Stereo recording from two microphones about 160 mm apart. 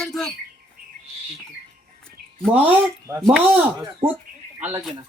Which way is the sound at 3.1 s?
20° right (ahead or behind).